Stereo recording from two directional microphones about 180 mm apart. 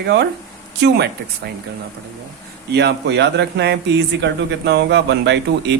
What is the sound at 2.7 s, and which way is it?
Speech, 70° right (ahead or behind).